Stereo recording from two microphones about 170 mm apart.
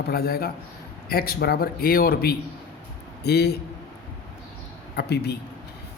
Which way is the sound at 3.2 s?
70° left (ahead or behind).